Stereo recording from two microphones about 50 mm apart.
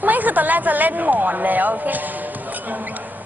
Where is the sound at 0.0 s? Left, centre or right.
Right.